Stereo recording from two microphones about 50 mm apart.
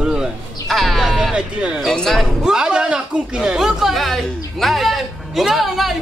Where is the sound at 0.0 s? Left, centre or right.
Centre.